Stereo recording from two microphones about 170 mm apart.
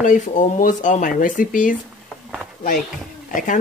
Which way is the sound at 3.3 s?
50° left (ahead or behind).